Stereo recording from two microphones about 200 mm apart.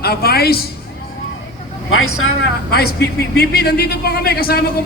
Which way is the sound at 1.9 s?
90° left.